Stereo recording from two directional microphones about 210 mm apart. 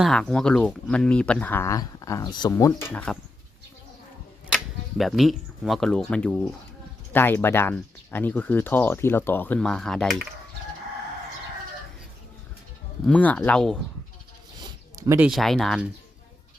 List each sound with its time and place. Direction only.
0.0 s speech: 5° left (ahead or behind)
4.5 s speech: centre (ahead or behind)
13.1 s speech: 5° left (ahead or behind)
14.6 s a sound: 15° right (ahead or behind)
15.3 s speech: centre (ahead or behind)